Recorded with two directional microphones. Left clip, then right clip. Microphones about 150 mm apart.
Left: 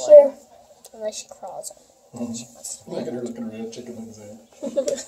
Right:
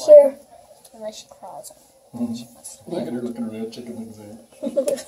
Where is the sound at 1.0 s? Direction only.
90° left.